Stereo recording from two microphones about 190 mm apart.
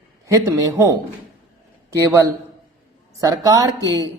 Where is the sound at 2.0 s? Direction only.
15° right (ahead or behind).